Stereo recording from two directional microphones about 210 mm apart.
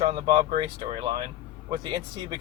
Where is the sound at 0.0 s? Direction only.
25° right (ahead or behind).